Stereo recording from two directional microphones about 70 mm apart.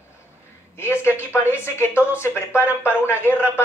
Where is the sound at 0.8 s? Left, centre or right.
Left.